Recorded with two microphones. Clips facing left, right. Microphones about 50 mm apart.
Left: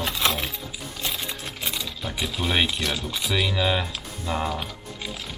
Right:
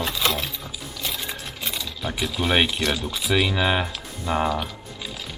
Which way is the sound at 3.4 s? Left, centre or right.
Right.